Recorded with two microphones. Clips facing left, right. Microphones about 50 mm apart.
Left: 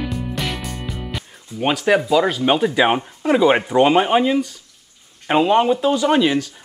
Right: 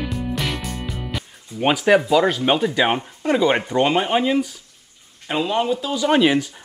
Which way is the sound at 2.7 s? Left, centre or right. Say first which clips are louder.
Left 3 dB; centre.